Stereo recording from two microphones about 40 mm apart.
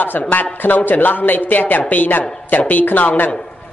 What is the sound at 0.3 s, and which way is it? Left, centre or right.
Speech, left.